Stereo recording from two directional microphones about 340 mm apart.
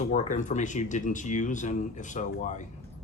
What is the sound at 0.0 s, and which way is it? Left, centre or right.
Speech, left.